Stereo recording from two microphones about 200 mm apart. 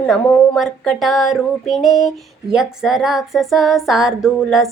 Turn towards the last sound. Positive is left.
turn(degrees=0)  # may be behind; listen again after turning